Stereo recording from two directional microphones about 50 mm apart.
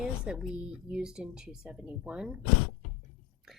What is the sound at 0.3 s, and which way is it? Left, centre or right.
Speech, centre.